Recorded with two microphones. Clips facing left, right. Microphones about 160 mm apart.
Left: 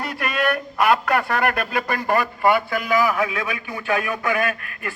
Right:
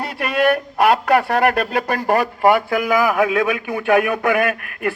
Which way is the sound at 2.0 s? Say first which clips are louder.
Right 4 dB; 40° right (ahead or behind).